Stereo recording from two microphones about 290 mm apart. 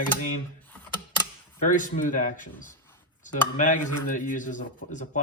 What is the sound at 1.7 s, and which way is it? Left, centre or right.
Speech, left.